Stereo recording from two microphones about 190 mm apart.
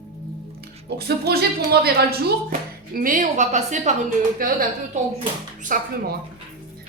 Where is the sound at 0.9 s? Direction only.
55° right (ahead or behind).